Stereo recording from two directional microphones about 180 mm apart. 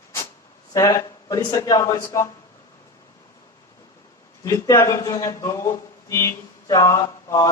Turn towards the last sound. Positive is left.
turn(degrees=20)  # may be behind; listen again after turning